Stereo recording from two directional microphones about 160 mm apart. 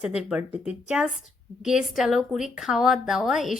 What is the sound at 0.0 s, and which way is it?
Speech, 5° right (ahead or behind).